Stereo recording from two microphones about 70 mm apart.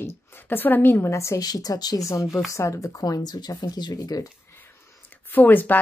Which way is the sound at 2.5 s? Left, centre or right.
Left.